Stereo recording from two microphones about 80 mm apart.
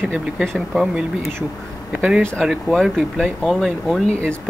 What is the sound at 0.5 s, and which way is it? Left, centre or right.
Speech, centre.